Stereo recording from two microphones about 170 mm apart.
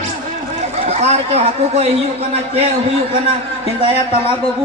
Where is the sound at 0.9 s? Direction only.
40° right (ahead or behind).